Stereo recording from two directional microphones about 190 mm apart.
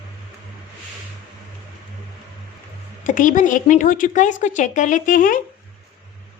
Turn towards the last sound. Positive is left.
turn(degrees=45)  # may be behind; listen again after turning